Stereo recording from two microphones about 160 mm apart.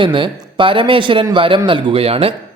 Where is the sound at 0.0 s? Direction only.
30° right (ahead or behind).